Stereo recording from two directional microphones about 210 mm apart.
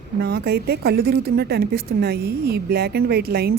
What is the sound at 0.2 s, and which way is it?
A woman's voice, 50° right (ahead or behind).